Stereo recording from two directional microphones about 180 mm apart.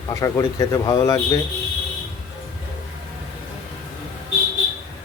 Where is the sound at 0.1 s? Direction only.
15° left (ahead or behind).